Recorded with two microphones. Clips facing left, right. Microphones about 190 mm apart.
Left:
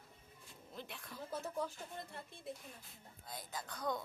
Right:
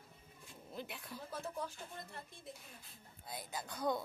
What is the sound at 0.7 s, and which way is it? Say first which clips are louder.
Speech: right 3 dB; 5° right (ahead or behind).